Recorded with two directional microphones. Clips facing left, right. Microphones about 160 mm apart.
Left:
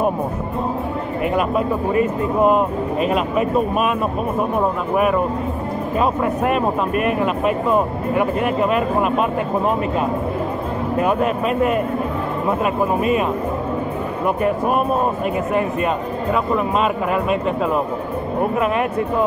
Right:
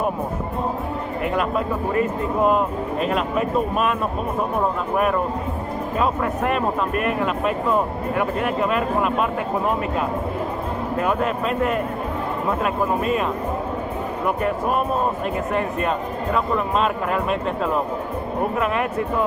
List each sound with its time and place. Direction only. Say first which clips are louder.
2.0 s speech: left 3 dB; 15° left (ahead or behind)
5.9 s speech: left 3 dB; 15° left (ahead or behind)
11.0 s speech: left 4 dB; 20° left (ahead or behind)
14.2 s speech: left 4 dB; 20° left (ahead or behind)
16.5 s speech: left 2 dB; 10° left (ahead or behind)